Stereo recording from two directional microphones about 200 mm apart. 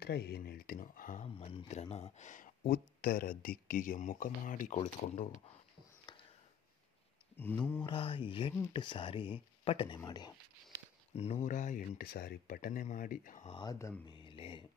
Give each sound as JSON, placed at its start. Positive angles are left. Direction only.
{"t": 0.0, "sound": "speech", "side_deg": 55}
{"t": 1.3, "sound": "speech", "side_deg": 25}
{"t": 6.1, "sound": "a sound", "side_deg": 20}
{"t": 7.3, "sound": "mantra", "side_deg": 10}
{"t": 7.8, "sound": "speech", "side_deg": 25}
{"t": 10.7, "sound": "a sound", "side_deg": -15}
{"t": 11.1, "sound": "speech", "side_deg": 35}
{"t": 13.7, "sound": "speech", "side_deg": 15}